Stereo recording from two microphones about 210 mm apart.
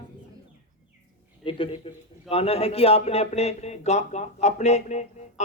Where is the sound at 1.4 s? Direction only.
25° left (ahead or behind).